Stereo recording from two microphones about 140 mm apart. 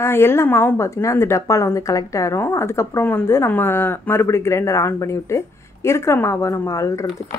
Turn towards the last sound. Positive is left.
turn(degrees=20)  # may be behind; listen again after turning